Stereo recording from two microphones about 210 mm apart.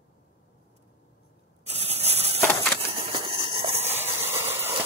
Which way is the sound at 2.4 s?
5° left (ahead or behind).